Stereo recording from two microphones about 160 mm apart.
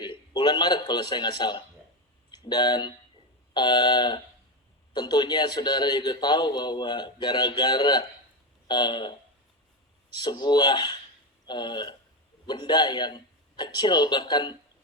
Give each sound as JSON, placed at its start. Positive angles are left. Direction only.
{"t": 0.0, "sound": "a man's voice", "side_deg": 25}
{"t": 10.2, "sound": "a man's voice", "side_deg": 30}